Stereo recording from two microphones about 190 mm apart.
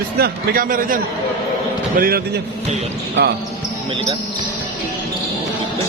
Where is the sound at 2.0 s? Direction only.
50° right (ahead or behind).